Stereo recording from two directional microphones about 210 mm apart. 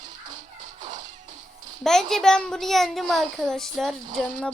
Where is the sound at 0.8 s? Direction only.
35° right (ahead or behind).